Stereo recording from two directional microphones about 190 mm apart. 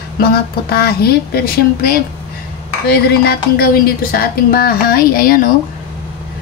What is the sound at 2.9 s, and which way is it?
A woman's voice, 55° left (ahead or behind).